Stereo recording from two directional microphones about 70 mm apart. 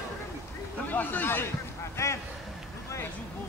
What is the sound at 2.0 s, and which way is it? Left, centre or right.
Speech, left.